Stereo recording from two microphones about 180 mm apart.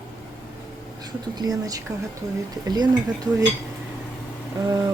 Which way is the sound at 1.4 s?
20° right (ahead or behind).